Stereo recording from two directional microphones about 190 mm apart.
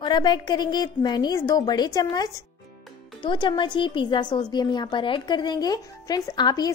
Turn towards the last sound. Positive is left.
turn(degrees=20)  # may be behind; listen again after turning